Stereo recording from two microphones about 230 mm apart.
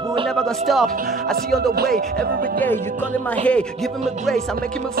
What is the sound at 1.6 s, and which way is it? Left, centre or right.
Music, right.